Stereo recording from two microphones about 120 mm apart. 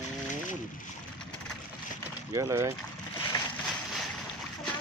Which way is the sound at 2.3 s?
25° right (ahead or behind).